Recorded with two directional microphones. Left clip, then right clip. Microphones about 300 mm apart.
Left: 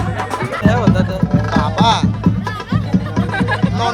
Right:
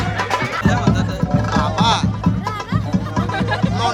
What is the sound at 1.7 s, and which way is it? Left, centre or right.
Music, centre.